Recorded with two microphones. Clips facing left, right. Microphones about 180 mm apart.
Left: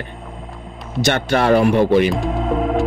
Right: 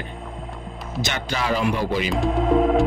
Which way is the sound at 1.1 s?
60° left (ahead or behind).